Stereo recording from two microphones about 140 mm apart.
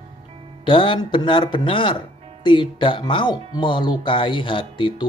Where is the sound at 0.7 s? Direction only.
35° left (ahead or behind).